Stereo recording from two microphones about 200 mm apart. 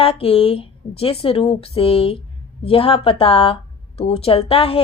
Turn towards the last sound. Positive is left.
turn(degrees=30)  # may be behind; listen again after turning